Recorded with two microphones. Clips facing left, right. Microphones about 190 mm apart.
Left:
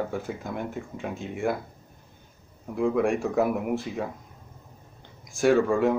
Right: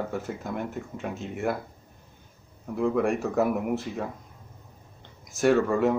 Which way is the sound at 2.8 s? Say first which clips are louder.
Left 1 dB; centre (ahead or behind).